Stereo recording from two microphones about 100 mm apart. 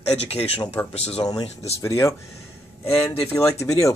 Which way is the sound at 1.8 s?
30° left (ahead or behind).